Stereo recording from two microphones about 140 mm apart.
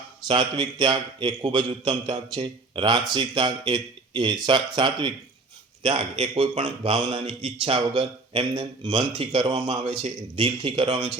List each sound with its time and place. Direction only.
0.3 s speech: 35° right (ahead or behind)
5.8 s speech: 45° right (ahead or behind)